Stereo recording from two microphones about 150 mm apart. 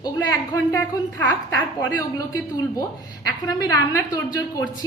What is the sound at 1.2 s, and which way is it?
Speech, 10° left (ahead or behind).